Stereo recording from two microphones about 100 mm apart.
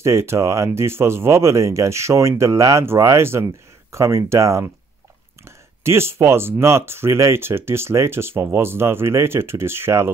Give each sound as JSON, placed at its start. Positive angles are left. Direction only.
{"t": 0.0, "sound": "speech", "side_deg": -25}